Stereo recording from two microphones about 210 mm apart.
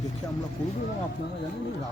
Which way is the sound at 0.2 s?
15° left (ahead or behind).